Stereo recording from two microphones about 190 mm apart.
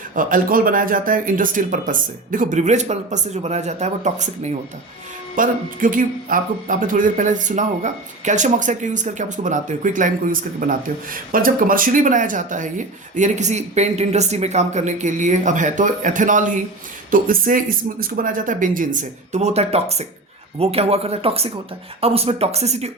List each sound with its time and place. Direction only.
0.1 s speech: 45° right (ahead or behind)